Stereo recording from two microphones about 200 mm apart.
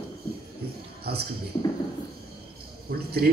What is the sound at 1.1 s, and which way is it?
Speech, 50° right (ahead or behind).